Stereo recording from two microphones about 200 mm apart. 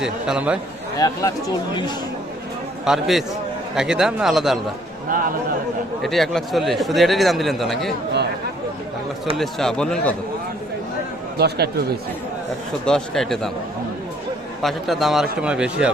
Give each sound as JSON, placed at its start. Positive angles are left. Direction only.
{"t": 0.0, "sound": "speech", "side_deg": -5}
{"t": 0.9, "sound": "speech", "side_deg": 20}
{"t": 2.8, "sound": "speech", "side_deg": 0}
{"t": 6.0, "sound": "speech", "side_deg": 0}
{"t": 9.4, "sound": "speech", "side_deg": 0}
{"t": 11.3, "sound": "speech", "side_deg": -55}
{"t": 12.8, "sound": "speech", "side_deg": 5}
{"t": 14.6, "sound": "speech", "side_deg": 0}